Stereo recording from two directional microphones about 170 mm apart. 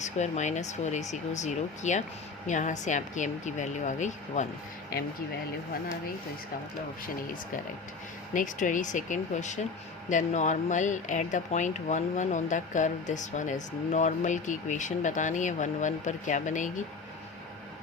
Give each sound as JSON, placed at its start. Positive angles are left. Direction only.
{"t": 0.0, "sound": "speech", "side_deg": 45}
{"t": 8.3, "sound": "speech", "side_deg": 50}